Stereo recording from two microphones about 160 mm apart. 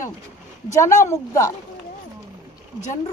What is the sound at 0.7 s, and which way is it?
Speech, 15° left (ahead or behind).